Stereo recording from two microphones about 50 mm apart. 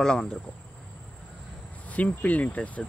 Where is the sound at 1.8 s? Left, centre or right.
Left.